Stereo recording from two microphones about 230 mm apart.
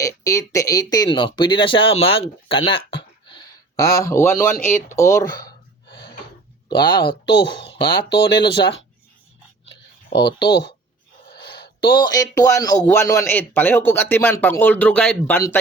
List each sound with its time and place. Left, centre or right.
0.0 s speech: centre
2.6 s a sound: left
6.7 s speech: centre
7.3 s speech: left
11.4 s a sound: left
11.8 s a man's voice: centre